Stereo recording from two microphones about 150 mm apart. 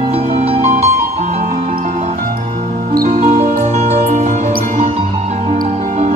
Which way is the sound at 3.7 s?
45° right (ahead or behind).